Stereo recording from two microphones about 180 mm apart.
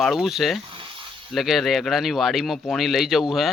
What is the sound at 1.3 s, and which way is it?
Speech, centre (ahead or behind).